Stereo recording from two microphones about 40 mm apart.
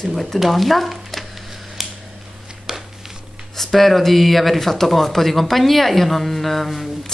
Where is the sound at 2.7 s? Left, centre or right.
Centre.